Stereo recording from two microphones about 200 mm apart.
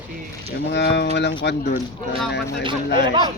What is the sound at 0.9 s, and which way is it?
A man's voice, 60° left (ahead or behind).